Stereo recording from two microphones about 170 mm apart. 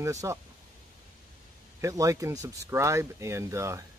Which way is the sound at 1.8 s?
20° right (ahead or behind).